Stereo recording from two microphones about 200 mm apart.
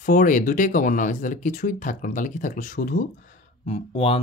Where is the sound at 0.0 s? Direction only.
40° left (ahead or behind).